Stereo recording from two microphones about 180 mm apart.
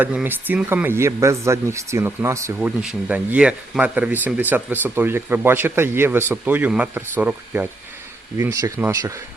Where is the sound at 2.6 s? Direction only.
5° right (ahead or behind).